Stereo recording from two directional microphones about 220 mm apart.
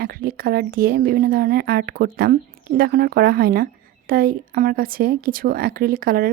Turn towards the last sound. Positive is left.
turn(degrees=-40)  # may be behind; listen again after turning